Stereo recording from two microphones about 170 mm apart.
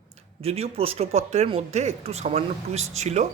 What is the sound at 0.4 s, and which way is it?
Speech, 35° right (ahead or behind).